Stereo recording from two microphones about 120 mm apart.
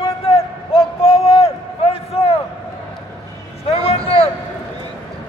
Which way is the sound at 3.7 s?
55° left (ahead or behind).